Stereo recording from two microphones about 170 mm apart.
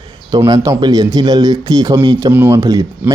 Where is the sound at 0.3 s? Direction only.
25° right (ahead or behind).